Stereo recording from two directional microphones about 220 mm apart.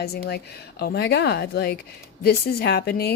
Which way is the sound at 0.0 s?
45° left (ahead or behind).